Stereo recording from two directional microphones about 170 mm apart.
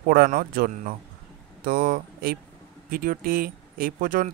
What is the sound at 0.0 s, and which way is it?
Speech, 60° right (ahead or behind).